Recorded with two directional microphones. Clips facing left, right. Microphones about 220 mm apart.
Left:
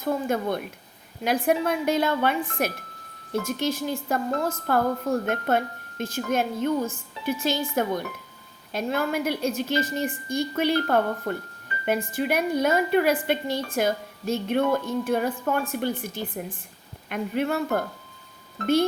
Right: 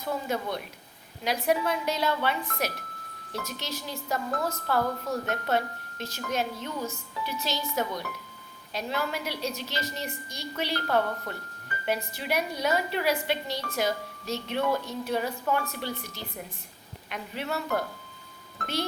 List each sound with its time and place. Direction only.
0.0 s a woman's voice: 50° left (ahead or behind)